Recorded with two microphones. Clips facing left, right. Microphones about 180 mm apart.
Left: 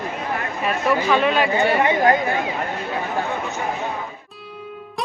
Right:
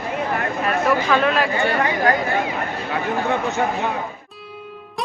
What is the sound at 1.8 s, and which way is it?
Speech, 20° left (ahead or behind).